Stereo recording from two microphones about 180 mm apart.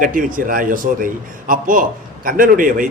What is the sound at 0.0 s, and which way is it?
A man's voice, 50° right (ahead or behind).